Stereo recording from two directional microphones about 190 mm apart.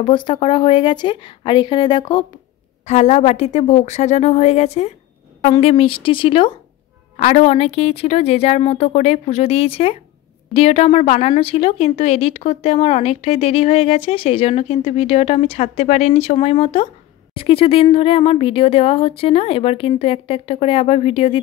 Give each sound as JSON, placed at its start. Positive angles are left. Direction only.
{"t": 0.0, "sound": "speech", "side_deg": 25}
{"t": 2.9, "sound": "speech", "side_deg": 35}